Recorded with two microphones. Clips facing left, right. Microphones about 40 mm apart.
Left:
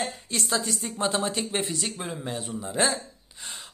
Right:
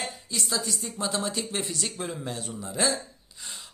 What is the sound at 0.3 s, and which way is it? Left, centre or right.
Speech, left.